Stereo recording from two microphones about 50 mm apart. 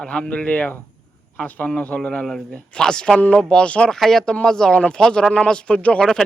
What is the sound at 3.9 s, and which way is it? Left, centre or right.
A man's voice, centre.